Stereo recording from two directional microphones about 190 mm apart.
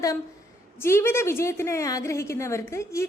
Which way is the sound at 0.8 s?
15° left (ahead or behind).